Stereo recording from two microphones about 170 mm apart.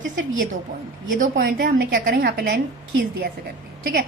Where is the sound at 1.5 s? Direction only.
65° right (ahead or behind).